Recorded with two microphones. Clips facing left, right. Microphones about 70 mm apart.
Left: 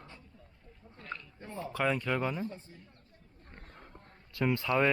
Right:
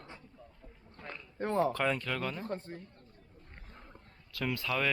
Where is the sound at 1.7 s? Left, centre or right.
Centre.